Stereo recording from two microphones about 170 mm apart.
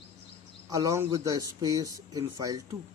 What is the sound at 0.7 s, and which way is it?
A man's voice, 20° right (ahead or behind).